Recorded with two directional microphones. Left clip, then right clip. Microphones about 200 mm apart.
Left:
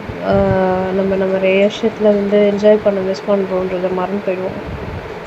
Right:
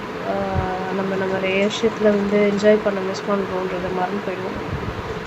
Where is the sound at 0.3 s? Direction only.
30° left (ahead or behind).